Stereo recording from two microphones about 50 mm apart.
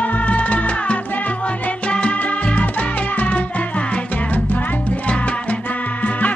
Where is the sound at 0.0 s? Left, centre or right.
Left.